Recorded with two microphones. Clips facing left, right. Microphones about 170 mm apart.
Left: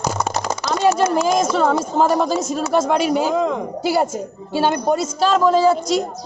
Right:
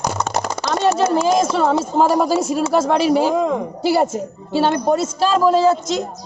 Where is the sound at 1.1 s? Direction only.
30° right (ahead or behind).